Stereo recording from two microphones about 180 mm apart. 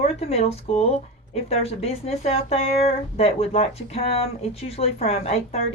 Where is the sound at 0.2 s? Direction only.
35° left (ahead or behind).